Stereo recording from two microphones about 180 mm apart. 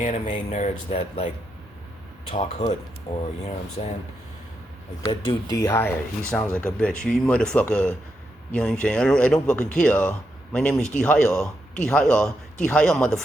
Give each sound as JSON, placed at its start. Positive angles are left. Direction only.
{"t": 0.0, "sound": "speech", "side_deg": 40}
{"t": 2.3, "sound": "speech", "side_deg": 40}
{"t": 5.3, "sound": "a man's voice", "side_deg": 20}